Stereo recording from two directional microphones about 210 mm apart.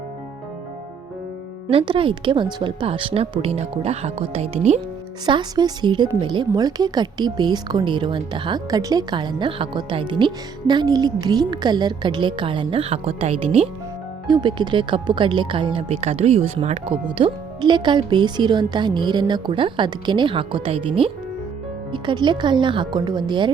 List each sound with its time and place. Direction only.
1.7 s speech: 25° right (ahead or behind)
5.2 s speech: 20° right (ahead or behind)